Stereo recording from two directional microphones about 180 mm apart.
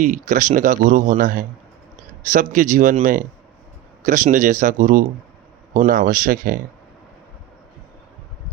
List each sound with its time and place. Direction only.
0.0 s speech: 45° right (ahead or behind)